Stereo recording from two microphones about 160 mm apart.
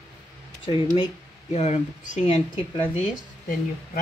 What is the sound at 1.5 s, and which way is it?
Speech, 45° left (ahead or behind).